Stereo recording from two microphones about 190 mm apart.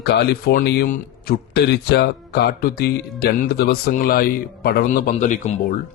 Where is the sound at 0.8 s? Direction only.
40° left (ahead or behind).